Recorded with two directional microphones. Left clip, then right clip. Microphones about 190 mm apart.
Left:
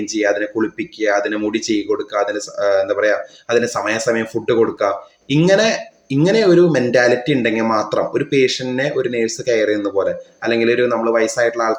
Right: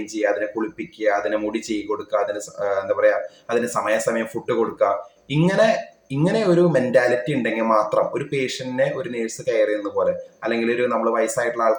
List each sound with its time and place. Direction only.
0.2 s speech: 45° left (ahead or behind)